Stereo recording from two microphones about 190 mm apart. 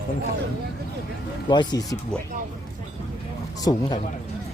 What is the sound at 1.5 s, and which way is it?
Speech, 20° left (ahead or behind).